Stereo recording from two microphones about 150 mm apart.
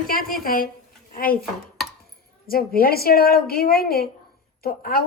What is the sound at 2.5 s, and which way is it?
A woman's voice, 85° left.